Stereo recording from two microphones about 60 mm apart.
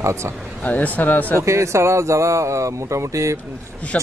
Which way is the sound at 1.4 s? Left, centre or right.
Right.